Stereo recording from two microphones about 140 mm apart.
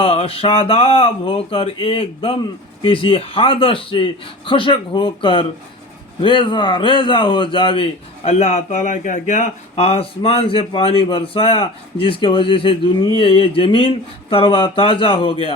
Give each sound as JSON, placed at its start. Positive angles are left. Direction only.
{"t": 0.0, "sound": "a man's voice", "side_deg": 45}